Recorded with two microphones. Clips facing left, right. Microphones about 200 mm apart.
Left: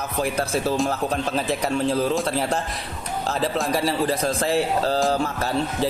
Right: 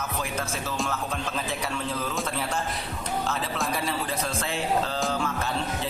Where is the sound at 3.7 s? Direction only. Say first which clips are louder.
Left 7 dB; 35° left (ahead or behind).